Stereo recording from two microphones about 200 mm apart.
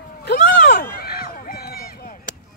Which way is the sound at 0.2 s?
50° left (ahead or behind).